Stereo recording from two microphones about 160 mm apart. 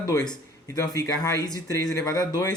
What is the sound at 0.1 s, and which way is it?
Speech, 20° left (ahead or behind).